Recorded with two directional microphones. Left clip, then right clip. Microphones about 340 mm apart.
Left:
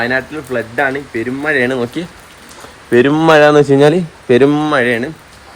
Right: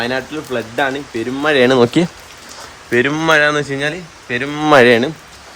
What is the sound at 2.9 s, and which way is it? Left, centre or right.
Speech, centre.